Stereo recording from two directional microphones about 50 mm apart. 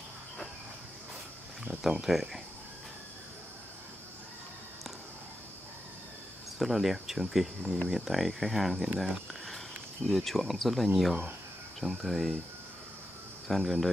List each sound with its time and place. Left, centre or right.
1.8 s speech: centre
6.6 s speech: centre
13.5 s speech: centre